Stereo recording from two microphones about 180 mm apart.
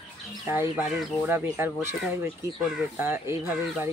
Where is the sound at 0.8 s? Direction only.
5° right (ahead or behind).